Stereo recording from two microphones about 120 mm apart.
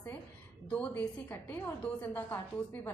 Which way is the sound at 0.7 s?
10° left (ahead or behind).